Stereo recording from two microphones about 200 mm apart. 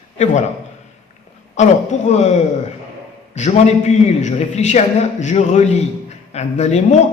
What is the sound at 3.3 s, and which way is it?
A man's voice, 35° left (ahead or behind).